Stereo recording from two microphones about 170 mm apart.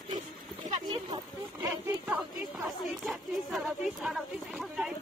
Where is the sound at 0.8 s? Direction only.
25° right (ahead or behind).